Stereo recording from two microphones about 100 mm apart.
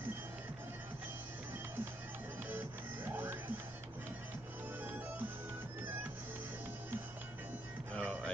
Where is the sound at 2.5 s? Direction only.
20° right (ahead or behind).